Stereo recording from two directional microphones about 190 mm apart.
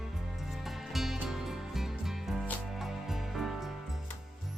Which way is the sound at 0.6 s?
Centre (ahead or behind).